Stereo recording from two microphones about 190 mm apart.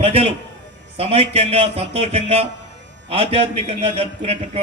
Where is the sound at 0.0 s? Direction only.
30° right (ahead or behind).